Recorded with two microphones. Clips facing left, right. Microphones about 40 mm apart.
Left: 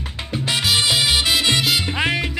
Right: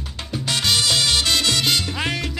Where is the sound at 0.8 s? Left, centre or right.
Centre.